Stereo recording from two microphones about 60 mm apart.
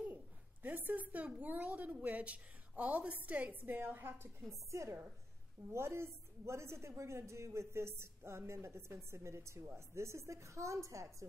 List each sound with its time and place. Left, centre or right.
0.0 s a sound: right
1.1 s a woman's voice: right
4.6 s a woman's voice: right